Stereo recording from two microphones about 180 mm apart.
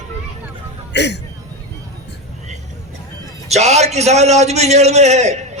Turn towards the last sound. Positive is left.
turn(degrees=-40)  # may be behind; listen again after turning